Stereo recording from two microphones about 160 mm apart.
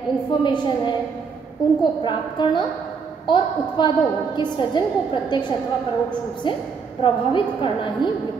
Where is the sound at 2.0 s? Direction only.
30° left (ahead or behind).